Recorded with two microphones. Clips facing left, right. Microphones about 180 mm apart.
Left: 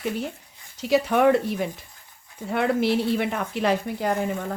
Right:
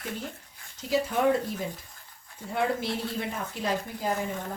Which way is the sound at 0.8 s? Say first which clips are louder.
Left 6 dB; 70° left (ahead or behind).